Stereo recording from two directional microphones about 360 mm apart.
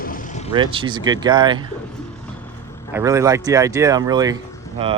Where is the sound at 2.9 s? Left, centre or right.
Centre.